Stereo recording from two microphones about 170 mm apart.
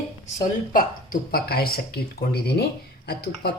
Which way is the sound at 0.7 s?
60° left (ahead or behind).